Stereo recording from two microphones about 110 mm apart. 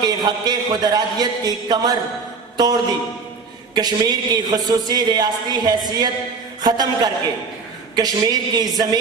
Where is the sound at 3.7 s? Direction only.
40° right (ahead or behind).